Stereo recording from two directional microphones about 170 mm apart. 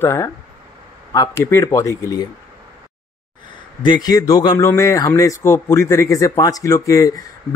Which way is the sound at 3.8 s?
25° left (ahead or behind).